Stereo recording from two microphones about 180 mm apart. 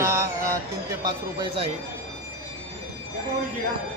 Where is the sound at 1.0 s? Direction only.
25° right (ahead or behind).